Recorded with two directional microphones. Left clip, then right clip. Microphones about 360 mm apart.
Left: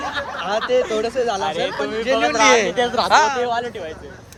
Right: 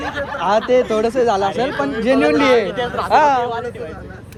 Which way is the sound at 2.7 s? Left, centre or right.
Left.